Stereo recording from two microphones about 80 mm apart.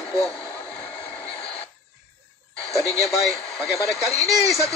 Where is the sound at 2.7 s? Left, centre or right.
Centre.